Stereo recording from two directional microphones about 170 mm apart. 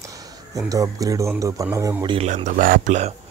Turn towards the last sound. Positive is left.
turn(degrees=-45)  # may be behind; listen again after turning